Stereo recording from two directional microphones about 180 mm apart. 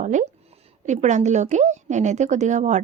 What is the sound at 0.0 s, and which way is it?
A woman's voice, 45° right (ahead or behind).